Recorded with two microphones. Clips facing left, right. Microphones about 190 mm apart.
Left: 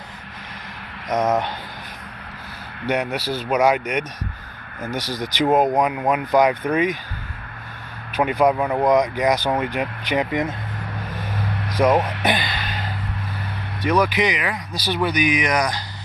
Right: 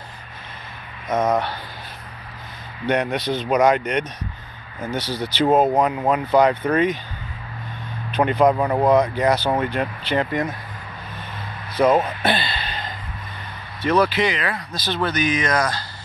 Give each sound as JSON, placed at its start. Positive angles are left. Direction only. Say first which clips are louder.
{"t": 1.1, "sound": "a sound", "louder": "even", "side_deg": 20}
{"t": 2.9, "sound": "speech", "louder": "right 2 dB", "side_deg": 5}
{"t": 8.1, "sound": "speech", "louder": "right 1 dB", "side_deg": 10}
{"t": 8.8, "sound": "speech", "louder": "even", "side_deg": 15}
{"t": 11.7, "sound": "a sound", "louder": "right 1 dB", "side_deg": 15}
{"t": 13.8, "sound": "speech", "louder": "right 1 dB", "side_deg": 15}